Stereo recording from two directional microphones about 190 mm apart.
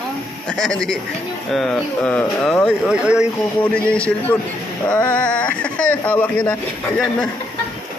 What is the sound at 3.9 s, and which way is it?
Speech, 5° left (ahead or behind).